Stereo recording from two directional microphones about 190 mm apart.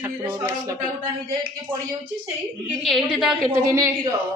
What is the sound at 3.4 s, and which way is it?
Speech, 15° right (ahead or behind).